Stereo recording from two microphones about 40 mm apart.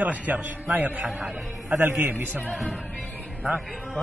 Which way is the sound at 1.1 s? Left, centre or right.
Centre.